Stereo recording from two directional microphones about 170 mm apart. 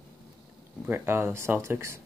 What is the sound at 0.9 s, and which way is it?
Speech, 15° right (ahead or behind).